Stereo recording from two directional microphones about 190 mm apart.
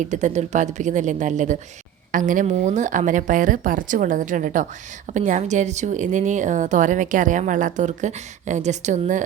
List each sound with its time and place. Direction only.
0.0 s a woman's voice: 40° right (ahead or behind)